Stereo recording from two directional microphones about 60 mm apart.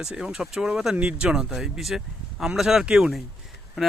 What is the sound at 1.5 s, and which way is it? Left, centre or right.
Speech, centre.